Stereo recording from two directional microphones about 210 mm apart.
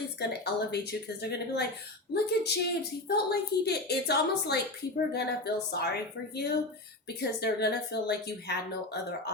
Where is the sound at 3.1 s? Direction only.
50° left (ahead or behind).